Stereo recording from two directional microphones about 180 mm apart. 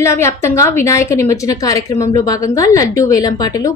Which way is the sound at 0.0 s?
15° left (ahead or behind).